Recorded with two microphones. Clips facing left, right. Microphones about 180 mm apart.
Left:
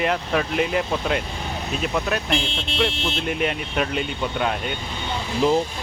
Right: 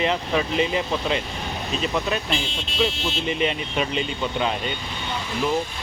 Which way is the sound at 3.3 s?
5° left (ahead or behind).